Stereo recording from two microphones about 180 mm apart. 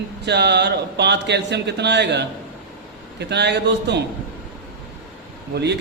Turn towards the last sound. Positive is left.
turn(degrees=-70)  # may be behind; listen again after turning